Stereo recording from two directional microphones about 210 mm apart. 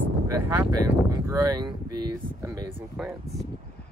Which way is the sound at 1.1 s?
15° right (ahead or behind).